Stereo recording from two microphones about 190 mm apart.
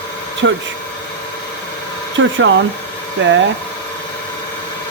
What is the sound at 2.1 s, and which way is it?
Speech, 75° right (ahead or behind).